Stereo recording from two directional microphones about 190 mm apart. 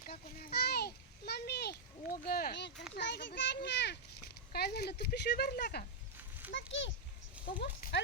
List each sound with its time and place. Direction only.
0.0 s a sound: 50° left (ahead or behind)
3.0 s a child's voice: 65° left (ahead or behind)
6.5 s a child's voice: 80° left
7.9 s speech: 65° left (ahead or behind)